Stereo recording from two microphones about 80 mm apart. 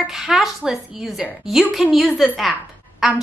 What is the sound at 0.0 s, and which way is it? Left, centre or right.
A woman's voice, centre.